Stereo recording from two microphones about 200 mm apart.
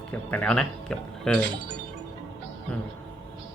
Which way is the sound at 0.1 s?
10° left (ahead or behind).